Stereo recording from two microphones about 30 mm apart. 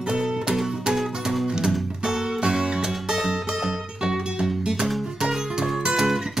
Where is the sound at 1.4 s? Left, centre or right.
Centre.